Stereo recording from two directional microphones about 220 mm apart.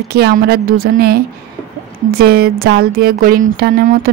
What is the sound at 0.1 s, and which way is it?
Speech, 45° right (ahead or behind).